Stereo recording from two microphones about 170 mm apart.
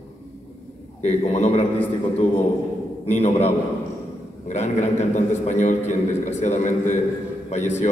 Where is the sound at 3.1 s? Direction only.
45° left (ahead or behind).